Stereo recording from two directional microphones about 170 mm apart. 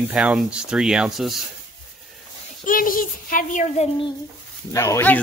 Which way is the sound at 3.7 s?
40° left (ahead or behind).